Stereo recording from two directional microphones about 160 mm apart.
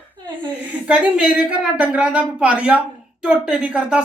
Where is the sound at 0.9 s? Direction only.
5° right (ahead or behind).